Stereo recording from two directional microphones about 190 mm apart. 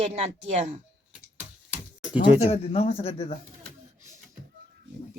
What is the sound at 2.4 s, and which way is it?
Speech, 35° left (ahead or behind).